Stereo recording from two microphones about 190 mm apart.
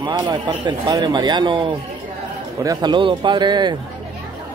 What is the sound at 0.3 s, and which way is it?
Speech, 20° right (ahead or behind).